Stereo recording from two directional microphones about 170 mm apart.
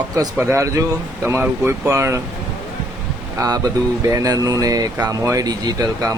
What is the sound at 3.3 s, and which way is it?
Speech, 20° right (ahead or behind).